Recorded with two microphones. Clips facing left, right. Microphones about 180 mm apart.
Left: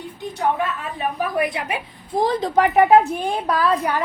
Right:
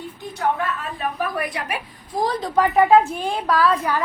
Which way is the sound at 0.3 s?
15° left (ahead or behind).